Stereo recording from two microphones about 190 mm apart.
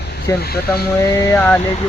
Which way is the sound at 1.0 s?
15° left (ahead or behind).